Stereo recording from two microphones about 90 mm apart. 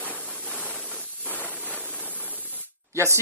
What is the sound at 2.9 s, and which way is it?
Speech, 30° right (ahead or behind).